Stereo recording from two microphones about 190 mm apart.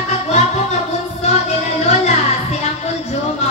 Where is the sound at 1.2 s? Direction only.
35° left (ahead or behind).